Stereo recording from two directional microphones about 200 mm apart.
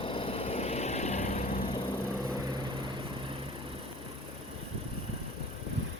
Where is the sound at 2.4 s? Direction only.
20° right (ahead or behind).